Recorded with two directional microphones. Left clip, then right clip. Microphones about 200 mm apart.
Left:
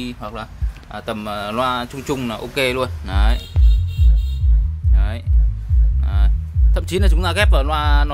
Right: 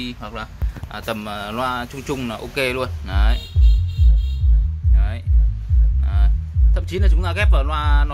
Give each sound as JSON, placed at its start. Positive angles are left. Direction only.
{"t": 0.0, "sound": "speech", "side_deg": 10}
{"t": 4.9, "sound": "music", "side_deg": 15}